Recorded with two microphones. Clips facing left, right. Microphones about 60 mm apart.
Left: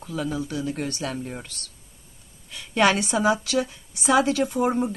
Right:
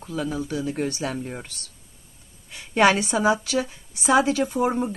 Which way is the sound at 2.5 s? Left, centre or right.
Centre.